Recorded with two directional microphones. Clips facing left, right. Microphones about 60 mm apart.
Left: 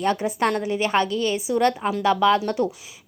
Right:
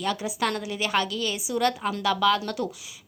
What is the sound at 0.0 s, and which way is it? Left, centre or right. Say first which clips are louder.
A woman's voice: left 5 dB; left.